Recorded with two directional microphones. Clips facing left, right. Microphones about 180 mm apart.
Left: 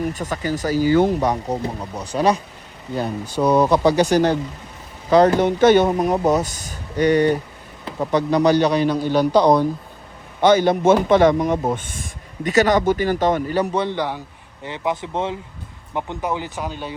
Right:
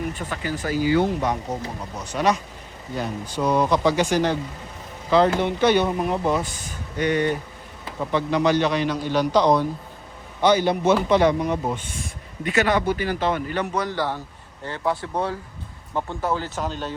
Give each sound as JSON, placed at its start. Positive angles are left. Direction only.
{"t": 0.1, "sound": "speech", "side_deg": 40}
{"t": 3.4, "sound": "speech", "side_deg": 45}
{"t": 12.5, "sound": "speech", "side_deg": 40}
{"t": 13.8, "sound": "a man's voice", "side_deg": 20}